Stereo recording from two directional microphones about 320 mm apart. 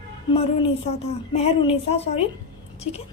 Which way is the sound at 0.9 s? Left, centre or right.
Centre.